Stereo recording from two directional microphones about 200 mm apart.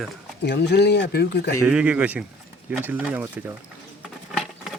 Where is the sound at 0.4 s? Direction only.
60° left (ahead or behind).